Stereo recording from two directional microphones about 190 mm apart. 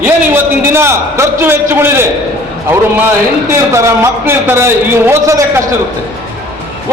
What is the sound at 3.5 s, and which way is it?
A man's voice, 10° right (ahead or behind).